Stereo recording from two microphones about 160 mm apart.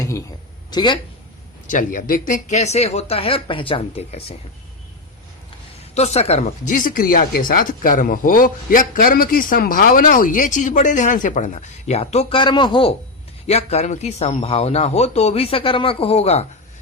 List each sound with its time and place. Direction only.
0.7 s speech: 25° left (ahead or behind)
1.6 s speech: 60° left (ahead or behind); by 4.4 s 40° left (ahead or behind)
5.9 s speech: 40° left (ahead or behind)
13.5 s speech: 40° left (ahead or behind)